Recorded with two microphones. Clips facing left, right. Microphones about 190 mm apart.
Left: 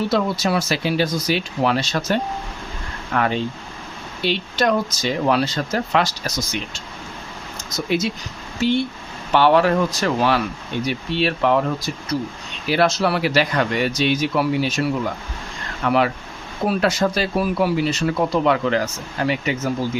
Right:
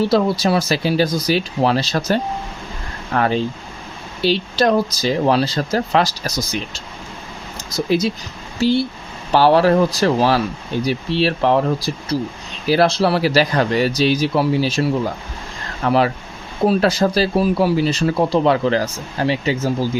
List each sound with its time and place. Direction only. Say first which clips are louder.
0.0 s speech: right 4 dB; 35° right (ahead or behind)